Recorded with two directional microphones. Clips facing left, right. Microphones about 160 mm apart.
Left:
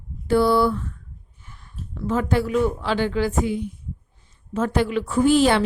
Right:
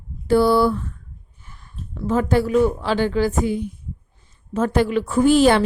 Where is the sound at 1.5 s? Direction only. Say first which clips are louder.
Right 1 dB; 40° right (ahead or behind).